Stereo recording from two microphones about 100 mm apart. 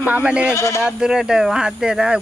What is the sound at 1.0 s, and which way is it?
Speech, 5° right (ahead or behind).